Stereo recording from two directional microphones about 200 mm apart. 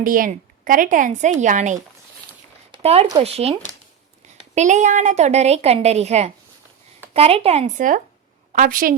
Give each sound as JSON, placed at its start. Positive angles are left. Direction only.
{"t": 0.0, "sound": "a woman's voice", "side_deg": -45}